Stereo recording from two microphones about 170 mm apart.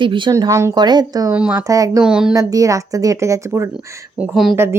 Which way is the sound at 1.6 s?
20° right (ahead or behind).